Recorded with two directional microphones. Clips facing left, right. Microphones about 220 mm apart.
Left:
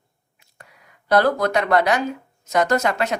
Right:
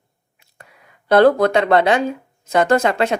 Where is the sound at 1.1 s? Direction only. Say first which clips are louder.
Right 6 dB; 30° right (ahead or behind).